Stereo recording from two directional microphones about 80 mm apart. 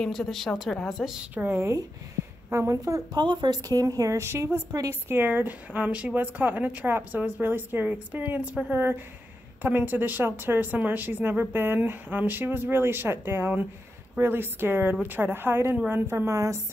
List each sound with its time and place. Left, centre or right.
0.0 s a woman's voice: centre
0.8 s a woman's voice: centre
1.3 s a woman's voice: right
2.2 s a sound: right
2.5 s a woman's voice: right
3.2 s a woman's voice: right